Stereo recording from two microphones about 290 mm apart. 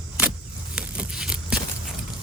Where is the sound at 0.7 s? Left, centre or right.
Centre.